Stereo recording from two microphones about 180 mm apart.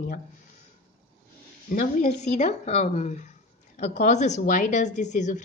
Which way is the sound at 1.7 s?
45° left (ahead or behind).